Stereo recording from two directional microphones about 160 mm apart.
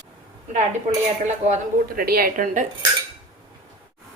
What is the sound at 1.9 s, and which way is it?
Speech, 70° right (ahead or behind).